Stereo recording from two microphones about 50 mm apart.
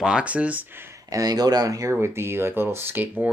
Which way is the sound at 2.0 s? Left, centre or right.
Right.